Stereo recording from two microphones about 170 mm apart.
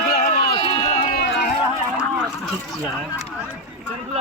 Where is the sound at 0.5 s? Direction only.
25° left (ahead or behind).